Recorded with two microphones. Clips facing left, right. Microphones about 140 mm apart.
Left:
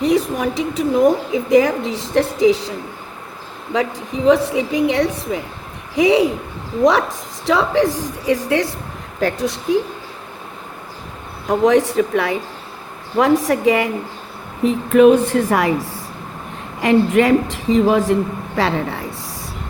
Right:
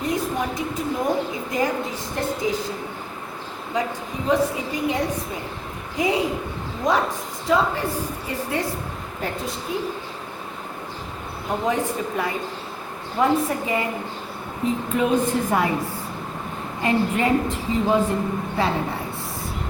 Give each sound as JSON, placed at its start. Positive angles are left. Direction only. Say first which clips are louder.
{"t": 0.0, "sound": "a woman's voice", "louder": "left 7 dB", "side_deg": 80}
{"t": 3.7, "sound": "a woman's voice", "louder": "left 6 dB", "side_deg": 75}
{"t": 7.4, "sound": "a woman's voice", "louder": "left 6 dB", "side_deg": 90}
{"t": 11.4, "sound": "a woman's voice", "louder": "left 9 dB", "side_deg": 85}